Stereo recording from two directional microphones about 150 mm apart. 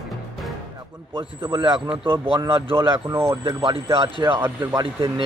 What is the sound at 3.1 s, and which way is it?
Speech, 20° right (ahead or behind).